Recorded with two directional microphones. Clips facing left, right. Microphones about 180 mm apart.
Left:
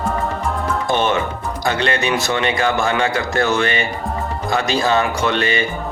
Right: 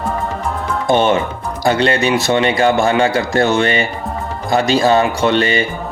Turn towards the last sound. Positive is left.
turn(degrees=-30)  # may be behind; listen again after turning